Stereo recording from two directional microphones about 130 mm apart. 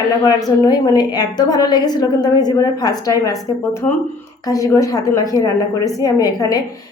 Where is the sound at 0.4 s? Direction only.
30° left (ahead or behind).